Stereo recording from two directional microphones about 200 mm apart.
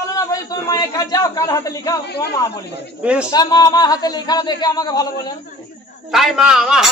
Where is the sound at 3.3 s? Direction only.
20° left (ahead or behind).